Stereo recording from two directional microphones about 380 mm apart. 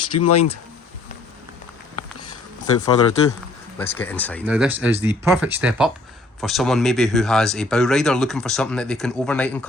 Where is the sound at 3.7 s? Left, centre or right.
Centre.